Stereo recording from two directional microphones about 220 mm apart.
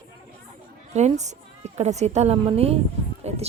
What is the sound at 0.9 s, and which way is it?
A woman's voice, 30° right (ahead or behind).